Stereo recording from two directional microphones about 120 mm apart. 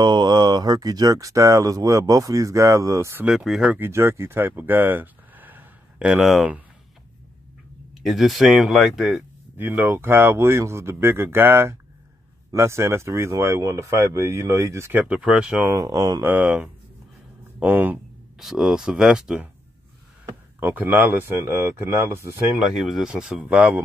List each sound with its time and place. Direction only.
0.0 s speech: 40° right (ahead or behind); by 3.3 s 20° right (ahead or behind)
3.3 s speech: 5° right (ahead or behind)
3.7 s speech: 20° right (ahead or behind)
8.0 s speech: centre (ahead or behind)
9.6 s speech: 15° right (ahead or behind)
15.6 s speech: 30° right (ahead or behind)
16.2 s speech: 15° right (ahead or behind)
18.4 s speech: 5° right (ahead or behind)
20.6 s speech: 15° right (ahead or behind)
22.6 s speech: 5° right (ahead or behind)